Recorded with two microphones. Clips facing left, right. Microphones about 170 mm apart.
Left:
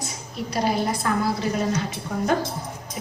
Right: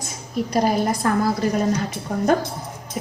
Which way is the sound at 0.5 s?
45° right (ahead or behind).